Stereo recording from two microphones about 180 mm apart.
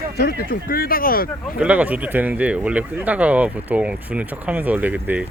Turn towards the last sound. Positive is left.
turn(degrees=-10)  # may be behind; listen again after turning